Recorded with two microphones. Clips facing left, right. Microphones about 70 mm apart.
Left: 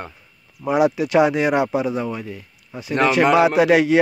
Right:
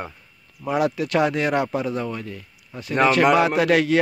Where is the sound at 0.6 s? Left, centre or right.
Centre.